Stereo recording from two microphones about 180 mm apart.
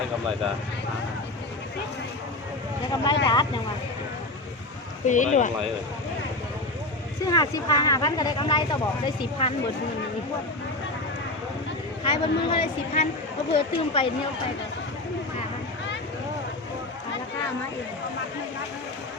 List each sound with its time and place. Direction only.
2.9 s speech: 25° left (ahead or behind)
5.0 s speech: 45° left (ahead or behind)
7.3 s speech: 20° left (ahead or behind)
12.0 s speech: 30° left (ahead or behind)